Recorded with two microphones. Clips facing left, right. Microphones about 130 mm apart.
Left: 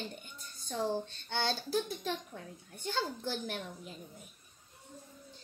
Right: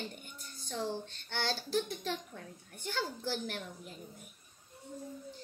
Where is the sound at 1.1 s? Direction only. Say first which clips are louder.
Left 2 dB; 15° left (ahead or behind).